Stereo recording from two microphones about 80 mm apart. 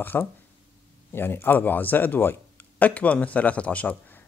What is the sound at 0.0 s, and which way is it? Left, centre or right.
Speech, left.